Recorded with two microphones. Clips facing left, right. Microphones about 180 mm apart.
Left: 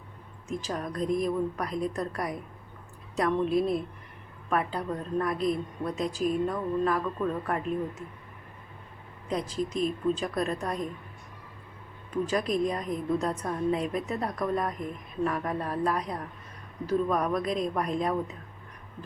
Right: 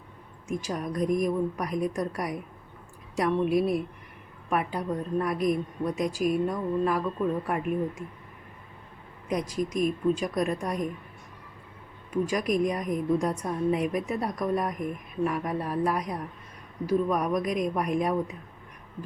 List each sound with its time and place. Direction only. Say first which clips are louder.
0.4 s a woman's voice: right 2 dB; 15° right (ahead or behind)
9.3 s a woman's voice: right 2 dB; 15° right (ahead or behind)
12.1 s a woman's voice: right 1 dB; 15° right (ahead or behind)